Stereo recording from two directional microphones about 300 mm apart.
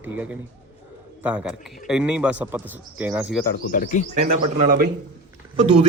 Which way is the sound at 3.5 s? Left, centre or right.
Left.